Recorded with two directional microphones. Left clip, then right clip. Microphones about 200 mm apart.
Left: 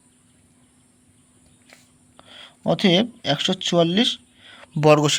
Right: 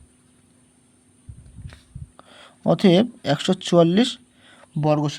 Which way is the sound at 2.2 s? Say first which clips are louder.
Right 2 dB; 15° right (ahead or behind).